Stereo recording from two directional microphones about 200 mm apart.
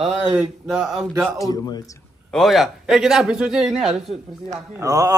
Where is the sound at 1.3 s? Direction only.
15° left (ahead or behind).